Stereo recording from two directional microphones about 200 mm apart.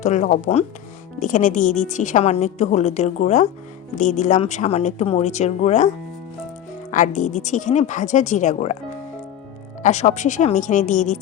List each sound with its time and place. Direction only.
0.0 s a woman's voice: 35° left (ahead or behind)
6.9 s a woman's voice: 40° left (ahead or behind)